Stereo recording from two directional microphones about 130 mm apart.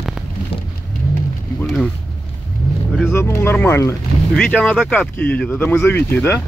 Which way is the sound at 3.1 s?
20° left (ahead or behind).